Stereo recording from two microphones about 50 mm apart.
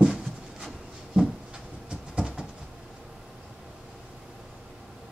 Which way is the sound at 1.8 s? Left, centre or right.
Centre.